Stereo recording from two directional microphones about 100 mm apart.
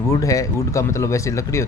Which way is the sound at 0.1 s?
35° left (ahead or behind).